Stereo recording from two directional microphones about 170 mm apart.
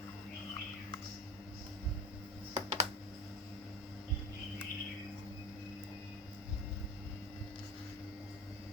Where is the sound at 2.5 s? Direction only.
40° right (ahead or behind).